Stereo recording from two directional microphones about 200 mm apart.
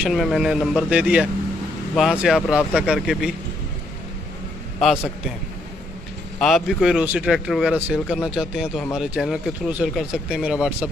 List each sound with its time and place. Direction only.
0.0 s speech: centre (ahead or behind)
6.4 s speech: centre (ahead or behind)